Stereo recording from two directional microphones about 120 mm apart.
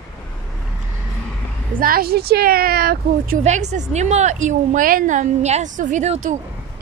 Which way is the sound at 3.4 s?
75° right (ahead or behind).